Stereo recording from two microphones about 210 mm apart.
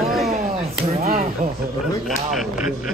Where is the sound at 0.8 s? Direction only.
30° right (ahead or behind).